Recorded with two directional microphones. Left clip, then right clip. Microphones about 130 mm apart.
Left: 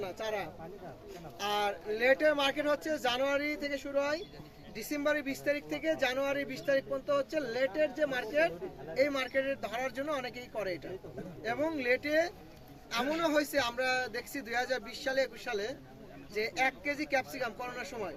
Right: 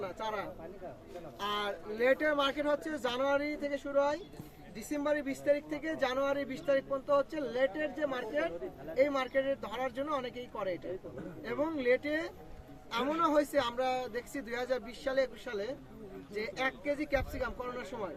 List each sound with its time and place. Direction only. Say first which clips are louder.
0.0 s speech: left 1 dB; 20° right (ahead or behind)